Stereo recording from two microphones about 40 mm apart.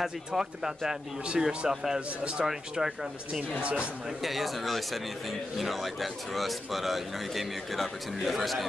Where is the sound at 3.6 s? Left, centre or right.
Right.